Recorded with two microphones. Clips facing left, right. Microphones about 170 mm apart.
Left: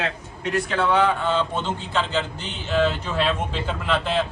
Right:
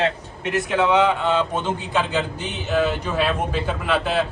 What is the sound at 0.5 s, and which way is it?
A man's voice, 15° right (ahead or behind).